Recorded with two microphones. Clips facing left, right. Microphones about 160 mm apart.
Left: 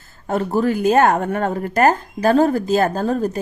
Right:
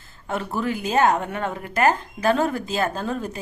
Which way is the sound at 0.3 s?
40° left (ahead or behind).